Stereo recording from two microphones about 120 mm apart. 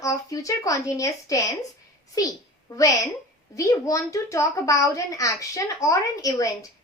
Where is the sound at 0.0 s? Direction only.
30° left (ahead or behind).